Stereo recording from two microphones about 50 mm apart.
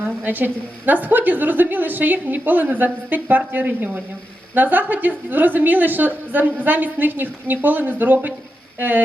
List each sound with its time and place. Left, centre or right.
0.0 s a woman's voice: right